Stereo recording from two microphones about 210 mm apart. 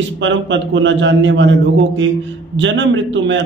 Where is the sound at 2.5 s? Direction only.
60° right (ahead or behind).